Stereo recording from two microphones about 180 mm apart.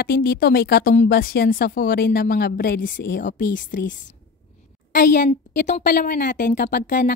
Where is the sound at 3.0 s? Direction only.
50° left (ahead or behind).